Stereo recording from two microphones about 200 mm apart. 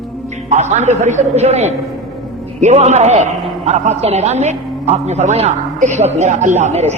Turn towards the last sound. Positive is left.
turn(degrees=-35)  # may be behind; listen again after turning